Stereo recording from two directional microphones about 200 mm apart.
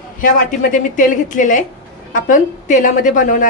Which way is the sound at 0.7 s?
40° left (ahead or behind).